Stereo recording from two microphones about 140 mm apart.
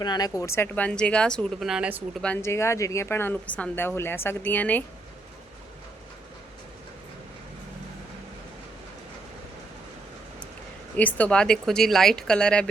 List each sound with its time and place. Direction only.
0.0 s speech: 30° left (ahead or behind)
0.9 s a woman's voice: 5° left (ahead or behind)
2.2 s a woman's voice: 15° left (ahead or behind)
10.9 s speech: 10° left (ahead or behind)